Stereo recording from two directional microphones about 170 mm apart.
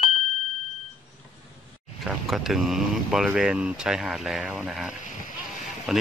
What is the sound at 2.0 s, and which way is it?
Speech, centre (ahead or behind).